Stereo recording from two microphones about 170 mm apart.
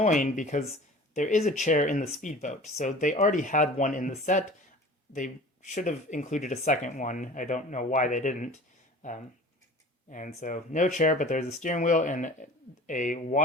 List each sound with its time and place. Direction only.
0.0 s speech: 45° left (ahead or behind)
9.0 s a sound: 45° left (ahead or behind)
10.1 s speech: 50° left (ahead or behind)